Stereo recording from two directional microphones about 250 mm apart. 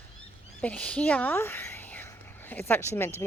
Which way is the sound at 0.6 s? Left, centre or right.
Centre.